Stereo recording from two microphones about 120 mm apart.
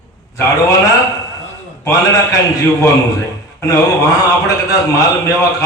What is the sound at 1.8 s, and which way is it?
Speech, 30° left (ahead or behind).